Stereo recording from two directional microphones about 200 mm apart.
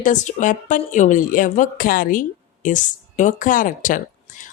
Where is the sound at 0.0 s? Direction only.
40° left (ahead or behind).